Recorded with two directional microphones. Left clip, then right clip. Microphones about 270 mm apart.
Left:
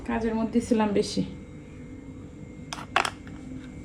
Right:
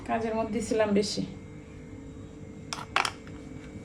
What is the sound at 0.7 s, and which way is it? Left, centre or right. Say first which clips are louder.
Speech: right 1 dB; centre.